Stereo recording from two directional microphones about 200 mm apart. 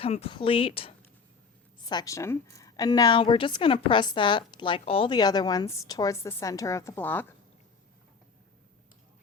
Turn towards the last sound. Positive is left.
turn(degrees=10)  # may be behind; listen again after turning